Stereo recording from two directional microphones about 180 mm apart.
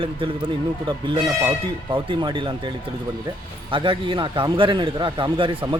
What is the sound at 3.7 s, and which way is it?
Speech, 30° right (ahead or behind).